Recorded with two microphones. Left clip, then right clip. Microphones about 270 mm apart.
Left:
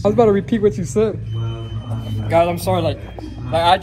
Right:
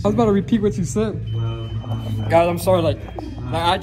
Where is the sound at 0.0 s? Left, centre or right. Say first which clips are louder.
Left 4 dB; centre.